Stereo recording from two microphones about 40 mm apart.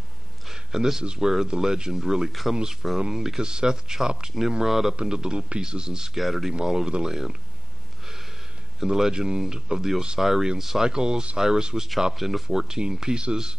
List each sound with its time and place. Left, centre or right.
0.5 s a sound: centre
1.0 s speech: right
6.1 s speech: centre
6.5 s speech: centre
8.7 s speech: centre
12.1 s speech: centre
12.4 s speech: centre